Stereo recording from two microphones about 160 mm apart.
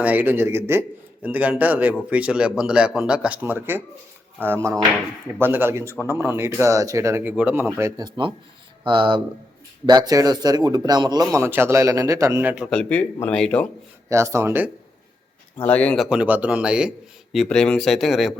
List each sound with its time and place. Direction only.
0.0 s a man's voice: 10° right (ahead or behind)
12.7 s speech: 10° left (ahead or behind)
14.1 s a man's voice: 20° right (ahead or behind)
15.6 s speech: 10° left (ahead or behind)
16.0 s a man's voice: 10° right (ahead or behind)